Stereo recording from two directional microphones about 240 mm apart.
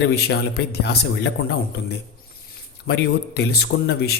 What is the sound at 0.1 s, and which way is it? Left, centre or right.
A man's voice, left.